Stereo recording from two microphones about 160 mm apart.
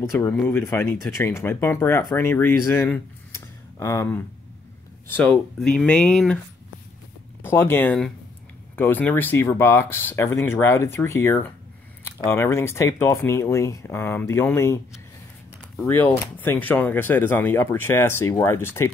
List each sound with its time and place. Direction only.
0.2 s speech: 10° left (ahead or behind)
7.4 s speech: 15° left (ahead or behind)
15.8 s speech: 10° left (ahead or behind)